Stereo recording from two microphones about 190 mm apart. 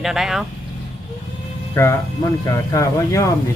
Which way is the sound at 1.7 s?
15° left (ahead or behind).